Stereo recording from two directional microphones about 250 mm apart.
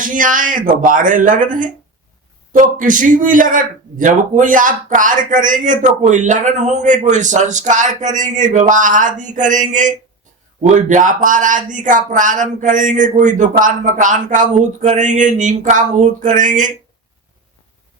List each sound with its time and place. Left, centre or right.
0.0 s a man's voice: right